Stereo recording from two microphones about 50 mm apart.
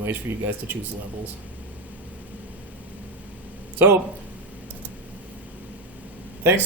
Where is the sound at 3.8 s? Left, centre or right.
Right.